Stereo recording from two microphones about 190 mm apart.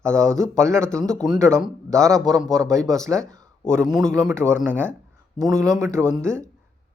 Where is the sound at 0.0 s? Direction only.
15° right (ahead or behind).